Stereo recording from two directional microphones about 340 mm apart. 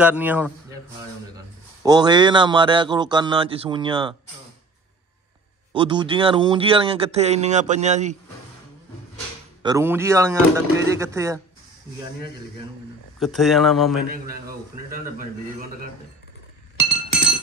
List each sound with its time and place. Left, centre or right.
0.0 s a man's voice: centre
5.7 s a man's voice: centre
9.6 s a man's voice: centre
13.2 s speech: centre
14.1 s a man's voice: right